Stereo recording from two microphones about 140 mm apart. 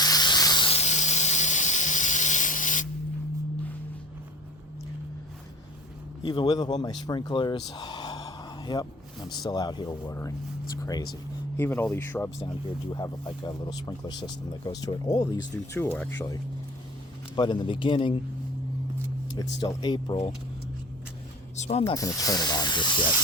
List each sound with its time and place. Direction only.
0.0 s hiss: 30° left (ahead or behind)
0.7 s steam: 50° left (ahead or behind); by 2.8 s 65° left (ahead or behind)
6.2 s speech: 30° left (ahead or behind)
11.5 s speech: 15° left (ahead or behind)
12.9 s speech: 30° left (ahead or behind)
15.8 s speech: 15° left (ahead or behind)
17.3 s speech: 35° left (ahead or behind)
19.3 s speech: 30° left (ahead or behind)
21.5 s speech: 55° left (ahead or behind)
21.9 s speech: 25° left (ahead or behind)